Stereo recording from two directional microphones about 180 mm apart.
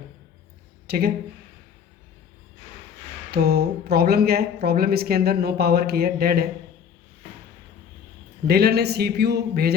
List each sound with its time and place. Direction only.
0.9 s speech: 60° right (ahead or behind)
3.3 s speech: 60° right (ahead or behind)
8.4 s speech: 60° right (ahead or behind)